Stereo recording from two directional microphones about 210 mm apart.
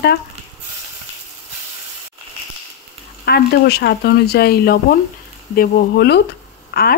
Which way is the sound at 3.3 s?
50° left (ahead or behind).